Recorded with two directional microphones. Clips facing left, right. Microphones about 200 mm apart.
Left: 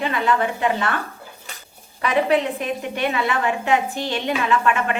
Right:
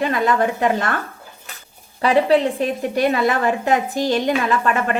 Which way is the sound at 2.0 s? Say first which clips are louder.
Right 4 dB; 30° right (ahead or behind).